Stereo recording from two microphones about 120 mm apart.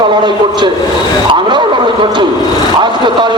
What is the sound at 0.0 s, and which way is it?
A man's voice, 40° right (ahead or behind).